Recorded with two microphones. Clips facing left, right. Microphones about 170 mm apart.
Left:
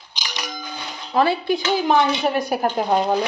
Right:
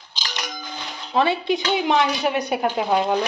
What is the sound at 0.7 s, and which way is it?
Music, 10° left (ahead or behind).